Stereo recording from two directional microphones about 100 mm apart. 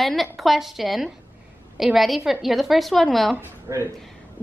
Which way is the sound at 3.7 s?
35° right (ahead or behind).